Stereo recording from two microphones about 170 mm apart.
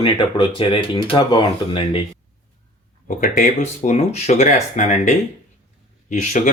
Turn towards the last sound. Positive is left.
turn(degrees=45)  # may be behind; listen again after turning